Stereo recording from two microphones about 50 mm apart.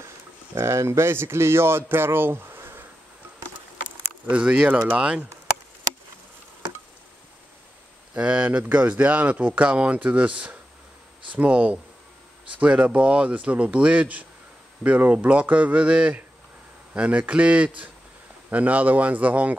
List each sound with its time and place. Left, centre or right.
0.6 s speech: right
3.8 s speech: right
8.1 s speech: right